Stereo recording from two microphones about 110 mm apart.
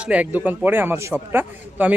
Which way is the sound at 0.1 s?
15° right (ahead or behind).